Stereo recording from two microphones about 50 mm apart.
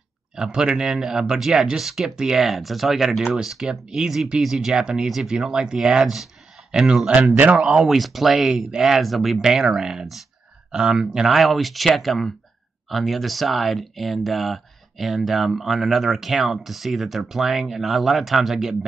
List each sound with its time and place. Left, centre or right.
0.4 s speech: centre
7.9 s speech: centre
11.2 s speech: centre